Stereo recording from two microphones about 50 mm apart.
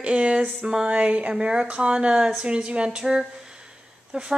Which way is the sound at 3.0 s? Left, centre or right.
Centre.